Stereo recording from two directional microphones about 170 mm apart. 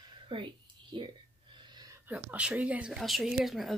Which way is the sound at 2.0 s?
10° right (ahead or behind).